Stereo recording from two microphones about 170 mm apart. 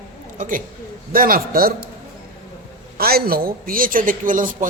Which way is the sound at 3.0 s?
65° right (ahead or behind).